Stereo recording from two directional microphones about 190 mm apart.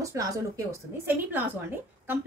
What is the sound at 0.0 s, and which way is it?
A woman's voice, 15° right (ahead or behind).